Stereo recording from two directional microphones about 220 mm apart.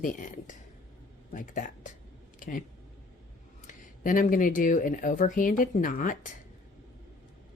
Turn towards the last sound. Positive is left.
turn(degrees=35)  # may be behind; listen again after turning